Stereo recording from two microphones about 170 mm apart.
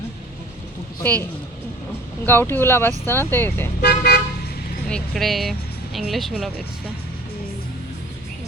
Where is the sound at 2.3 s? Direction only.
10° left (ahead or behind).